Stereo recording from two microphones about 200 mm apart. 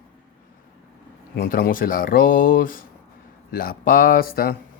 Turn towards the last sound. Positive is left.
turn(degrees=45)  # may be behind; listen again after turning